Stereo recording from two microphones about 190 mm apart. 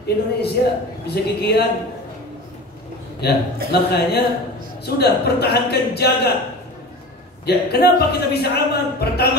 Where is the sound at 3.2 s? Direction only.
60° left (ahead or behind).